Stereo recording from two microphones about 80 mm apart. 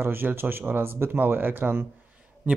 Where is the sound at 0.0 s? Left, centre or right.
Right.